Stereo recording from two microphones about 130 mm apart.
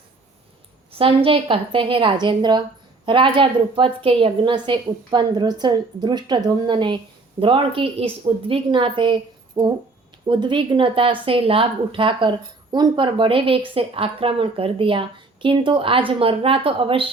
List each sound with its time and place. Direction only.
0.9 s a woman's voice: 45° right (ahead or behind)